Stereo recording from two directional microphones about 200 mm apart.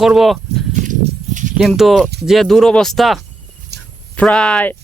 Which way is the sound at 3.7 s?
55° right (ahead or behind).